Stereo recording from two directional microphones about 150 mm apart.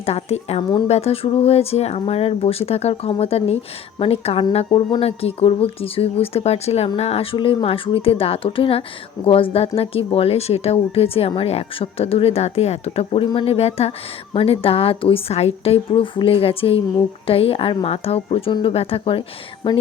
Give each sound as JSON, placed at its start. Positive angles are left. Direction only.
{"t": 0.0, "sound": "speech", "side_deg": 45}